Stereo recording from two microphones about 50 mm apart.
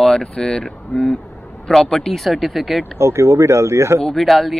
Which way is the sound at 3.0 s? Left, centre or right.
Right.